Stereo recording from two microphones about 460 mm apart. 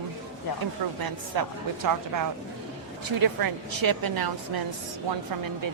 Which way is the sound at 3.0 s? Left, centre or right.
Right.